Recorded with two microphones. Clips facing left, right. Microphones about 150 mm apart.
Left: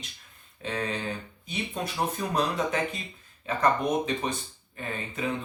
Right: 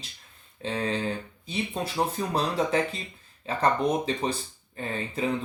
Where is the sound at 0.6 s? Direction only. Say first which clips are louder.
Right 3 dB; 30° right (ahead or behind).